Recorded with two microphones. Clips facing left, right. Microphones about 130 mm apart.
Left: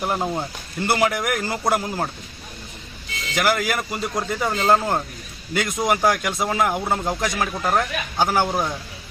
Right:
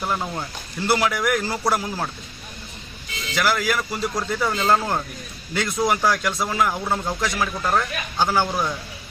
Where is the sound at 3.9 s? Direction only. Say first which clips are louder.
Even; 20° left (ahead or behind).